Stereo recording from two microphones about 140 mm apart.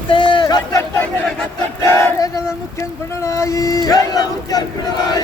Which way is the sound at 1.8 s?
20° left (ahead or behind).